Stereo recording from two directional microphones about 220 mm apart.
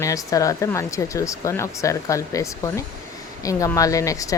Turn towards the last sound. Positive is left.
turn(degrees=15)  # may be behind; listen again after turning